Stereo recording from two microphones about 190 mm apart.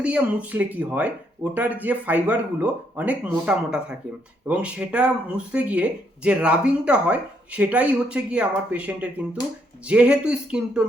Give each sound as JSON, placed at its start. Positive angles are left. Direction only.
{"t": 0.0, "sound": "speech", "side_deg": -5}